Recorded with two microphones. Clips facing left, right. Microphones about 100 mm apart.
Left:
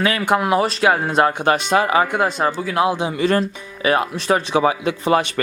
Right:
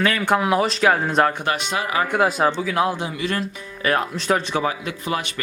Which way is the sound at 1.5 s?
35° left (ahead or behind).